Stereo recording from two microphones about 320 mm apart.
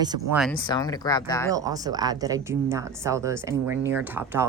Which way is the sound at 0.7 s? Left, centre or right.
Centre.